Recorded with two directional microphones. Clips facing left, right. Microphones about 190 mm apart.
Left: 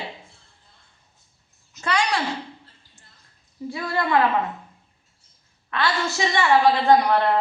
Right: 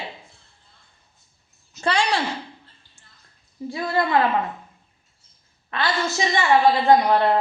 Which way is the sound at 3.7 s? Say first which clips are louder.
Right 2 dB; 25° right (ahead or behind).